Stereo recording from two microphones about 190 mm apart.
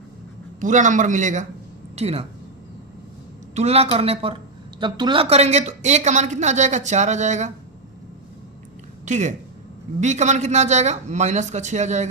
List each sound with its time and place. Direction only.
0.6 s speech: 40° right (ahead or behind)
3.5 s a woman's voice: 35° right (ahead or behind)
9.0 s speech: 40° right (ahead or behind)